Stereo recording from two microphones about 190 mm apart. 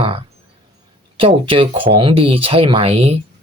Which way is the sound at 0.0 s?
30° right (ahead or behind).